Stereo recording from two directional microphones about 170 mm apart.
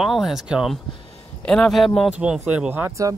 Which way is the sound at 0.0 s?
Centre (ahead or behind).